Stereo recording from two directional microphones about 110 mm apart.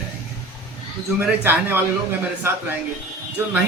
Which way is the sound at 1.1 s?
20° right (ahead or behind).